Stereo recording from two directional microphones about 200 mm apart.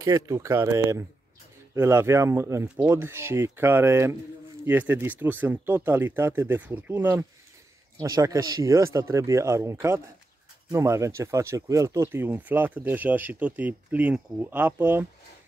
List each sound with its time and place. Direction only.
0.0 s speech: 15° right (ahead or behind)